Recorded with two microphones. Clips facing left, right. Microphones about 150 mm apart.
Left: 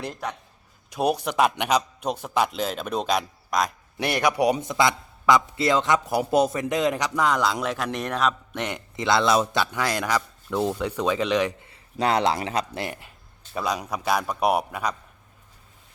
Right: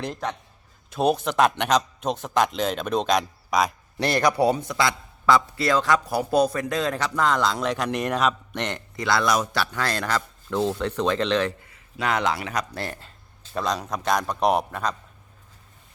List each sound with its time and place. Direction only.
0.0 s a man's voice: 10° left (ahead or behind)
3.9 s a man's voice: 10° left (ahead or behind)
9.0 s a man's voice: 20° left (ahead or behind)
11.7 s speech: 35° left (ahead or behind)
12.7 s a man's voice: 15° left (ahead or behind)